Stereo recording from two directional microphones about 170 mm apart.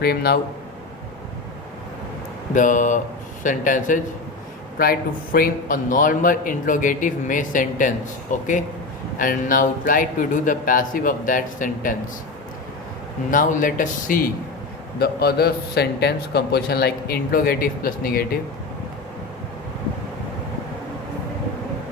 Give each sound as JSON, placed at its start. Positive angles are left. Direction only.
{"t": 0.0, "sound": "speech", "side_deg": 65}
{"t": 2.6, "sound": "a man's voice", "side_deg": 50}
{"t": 13.3, "sound": "a man's voice", "side_deg": 50}
{"t": 14.9, "sound": "a man's voice", "side_deg": 70}